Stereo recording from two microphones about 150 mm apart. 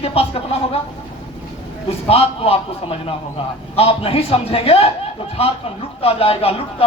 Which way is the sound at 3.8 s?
40° left (ahead or behind).